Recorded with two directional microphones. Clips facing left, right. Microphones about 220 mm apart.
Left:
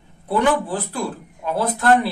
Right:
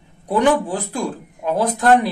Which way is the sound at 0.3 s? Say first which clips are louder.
Right 2 dB; 15° right (ahead or behind).